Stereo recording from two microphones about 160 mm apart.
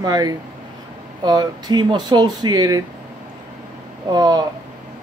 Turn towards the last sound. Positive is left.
turn(degrees=-25)  # may be behind; listen again after turning